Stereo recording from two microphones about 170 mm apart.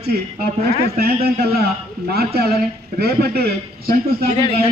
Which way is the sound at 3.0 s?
65° right (ahead or behind).